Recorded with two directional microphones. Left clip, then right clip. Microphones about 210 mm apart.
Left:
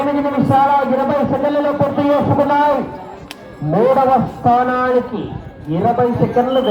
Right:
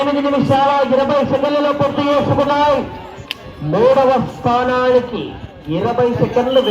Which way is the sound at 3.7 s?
40° left (ahead or behind).